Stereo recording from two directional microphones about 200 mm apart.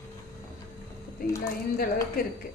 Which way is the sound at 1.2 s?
45° left (ahead or behind).